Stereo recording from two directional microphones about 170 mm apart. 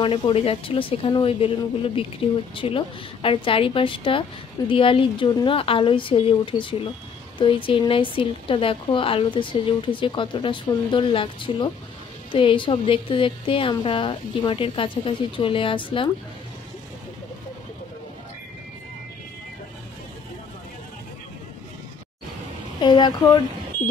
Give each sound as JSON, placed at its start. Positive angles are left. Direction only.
{"t": 0.0, "sound": "a woman's voice", "side_deg": 35}
{"t": 22.8, "sound": "speech", "side_deg": 25}